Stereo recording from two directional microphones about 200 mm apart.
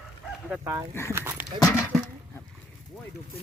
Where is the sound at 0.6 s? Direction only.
15° right (ahead or behind).